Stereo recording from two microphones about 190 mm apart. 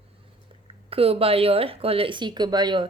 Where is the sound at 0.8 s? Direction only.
30° right (ahead or behind).